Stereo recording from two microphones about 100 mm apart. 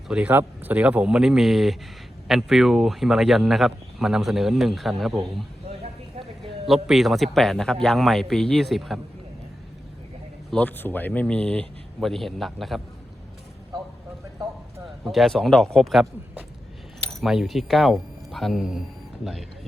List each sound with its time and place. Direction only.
0.1 s speech: 15° right (ahead or behind)
6.4 s speech: 5° right (ahead or behind)
10.5 s speech: 15° left (ahead or behind)
11.9 s speech: centre (ahead or behind)
15.0 s speech: centre (ahead or behind)
17.1 s speech: centre (ahead or behind)